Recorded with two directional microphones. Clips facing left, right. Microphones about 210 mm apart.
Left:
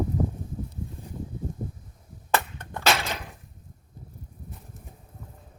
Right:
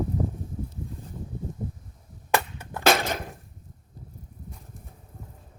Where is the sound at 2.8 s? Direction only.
45° right (ahead or behind).